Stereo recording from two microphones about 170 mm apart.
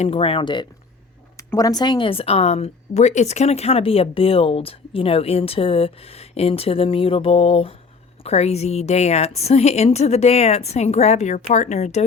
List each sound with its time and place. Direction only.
0.0 s speech: 35° left (ahead or behind)